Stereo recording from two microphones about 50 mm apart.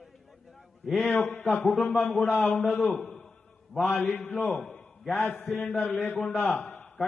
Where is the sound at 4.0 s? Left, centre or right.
Left.